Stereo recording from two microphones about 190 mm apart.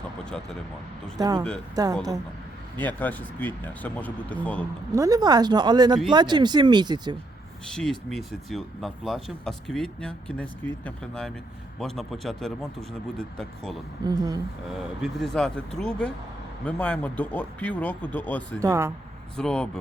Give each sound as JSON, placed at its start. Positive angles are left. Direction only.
{"t": 0.3, "sound": "speech", "side_deg": 5}
{"t": 1.2, "sound": "speech", "side_deg": -20}
{"t": 2.7, "sound": "speech", "side_deg": 10}
{"t": 4.9, "sound": "speech", "side_deg": -20}
{"t": 7.7, "sound": "speech", "side_deg": 0}
{"t": 14.0, "sound": "speech", "side_deg": -20}
{"t": 15.0, "sound": "speech", "side_deg": 0}
{"t": 18.6, "sound": "speech", "side_deg": -15}
{"t": 19.4, "sound": "speech", "side_deg": 5}